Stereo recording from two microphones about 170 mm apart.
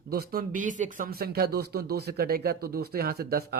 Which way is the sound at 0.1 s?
65° right (ahead or behind).